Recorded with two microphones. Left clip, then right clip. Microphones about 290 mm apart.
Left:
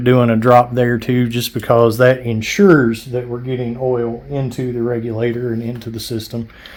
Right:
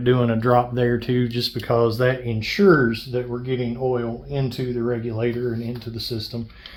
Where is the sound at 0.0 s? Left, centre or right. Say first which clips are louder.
Left 7 dB; left.